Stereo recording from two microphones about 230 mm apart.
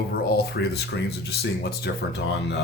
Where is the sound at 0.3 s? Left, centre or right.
Left.